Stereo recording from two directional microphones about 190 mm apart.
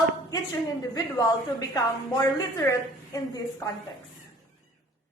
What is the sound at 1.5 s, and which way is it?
A woman's voice, 20° left (ahead or behind).